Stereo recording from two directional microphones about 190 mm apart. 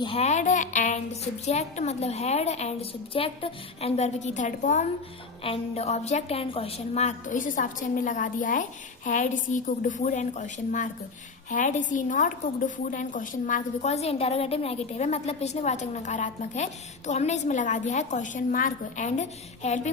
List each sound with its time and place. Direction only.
0.0 s a woman's voice: 30° left (ahead or behind)